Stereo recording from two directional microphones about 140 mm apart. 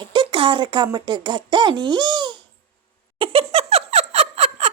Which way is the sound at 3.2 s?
45° right (ahead or behind).